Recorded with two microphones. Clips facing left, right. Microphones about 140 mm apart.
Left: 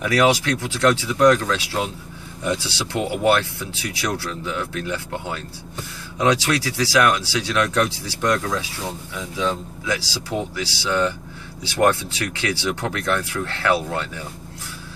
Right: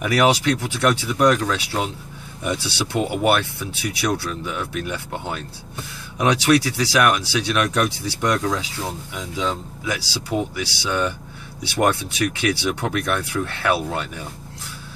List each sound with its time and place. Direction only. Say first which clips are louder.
0.0 s speech: even; 15° right (ahead or behind)